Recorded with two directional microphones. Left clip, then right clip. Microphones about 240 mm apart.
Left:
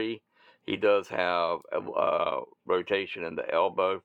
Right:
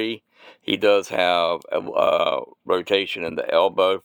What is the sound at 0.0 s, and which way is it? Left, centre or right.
Speech, right.